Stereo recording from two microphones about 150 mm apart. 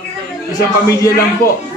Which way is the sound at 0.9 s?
20° left (ahead or behind).